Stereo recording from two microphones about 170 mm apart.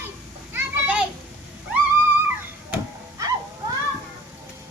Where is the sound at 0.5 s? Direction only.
10° right (ahead or behind).